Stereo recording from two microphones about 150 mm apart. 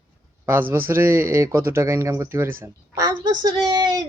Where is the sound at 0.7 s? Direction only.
15° right (ahead or behind).